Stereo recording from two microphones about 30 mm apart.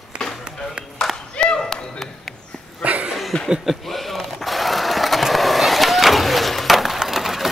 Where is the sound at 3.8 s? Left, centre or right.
Centre.